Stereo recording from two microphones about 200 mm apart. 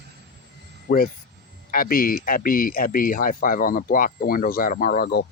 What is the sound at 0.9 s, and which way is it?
Speech, 45° left (ahead or behind).